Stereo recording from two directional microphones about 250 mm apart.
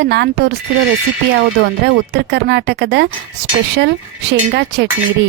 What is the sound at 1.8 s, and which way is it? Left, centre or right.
A woman's voice, right.